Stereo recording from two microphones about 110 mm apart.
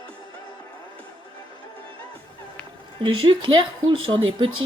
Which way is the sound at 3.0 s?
50° right (ahead or behind).